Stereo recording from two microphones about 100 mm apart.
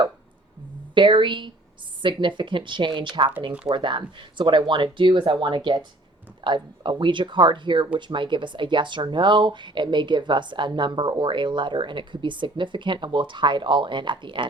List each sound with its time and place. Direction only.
0.9 s a woman's voice: 55° right (ahead or behind)